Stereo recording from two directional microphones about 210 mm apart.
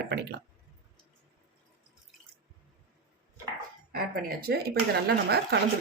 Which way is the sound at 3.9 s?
45° right (ahead or behind).